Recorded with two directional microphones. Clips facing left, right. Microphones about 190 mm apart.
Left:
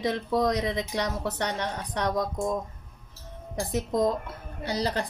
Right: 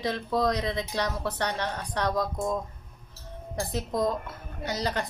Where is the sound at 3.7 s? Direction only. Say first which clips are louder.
Left 3 dB; 20° left (ahead or behind).